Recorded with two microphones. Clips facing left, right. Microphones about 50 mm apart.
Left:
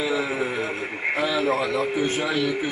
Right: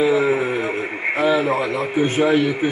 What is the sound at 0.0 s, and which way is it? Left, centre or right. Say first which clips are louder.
Radio: right 7 dB; right.